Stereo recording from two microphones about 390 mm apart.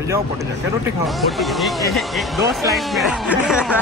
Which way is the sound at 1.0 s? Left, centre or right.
Centre.